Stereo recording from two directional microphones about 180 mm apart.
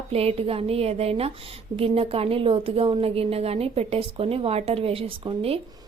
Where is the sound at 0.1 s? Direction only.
35° right (ahead or behind).